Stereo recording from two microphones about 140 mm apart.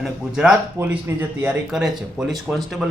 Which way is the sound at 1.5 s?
5° right (ahead or behind).